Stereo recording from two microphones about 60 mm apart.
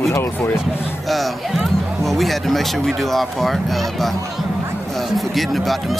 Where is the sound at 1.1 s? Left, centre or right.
Centre.